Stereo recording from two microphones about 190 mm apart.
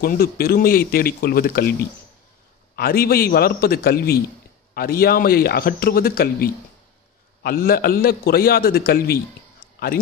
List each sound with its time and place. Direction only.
0.0 s a man's voice: 50° left (ahead or behind)